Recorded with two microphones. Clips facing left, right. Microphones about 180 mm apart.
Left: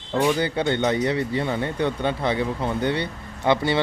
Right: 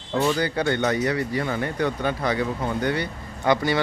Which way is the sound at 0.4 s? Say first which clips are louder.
Left 1 dB; 25° left (ahead or behind).